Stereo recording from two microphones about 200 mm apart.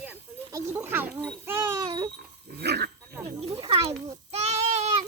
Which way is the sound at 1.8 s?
20° right (ahead or behind).